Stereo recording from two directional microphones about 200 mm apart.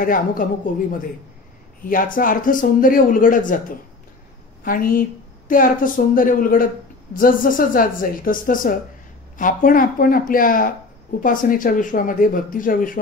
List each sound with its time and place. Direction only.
0.0 s speech: 45° left (ahead or behind)
1.9 s speech: 45° left (ahead or behind)
4.6 s speech: 45° left (ahead or behind)